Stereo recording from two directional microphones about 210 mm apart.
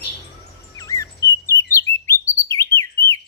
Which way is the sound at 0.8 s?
15° left (ahead or behind).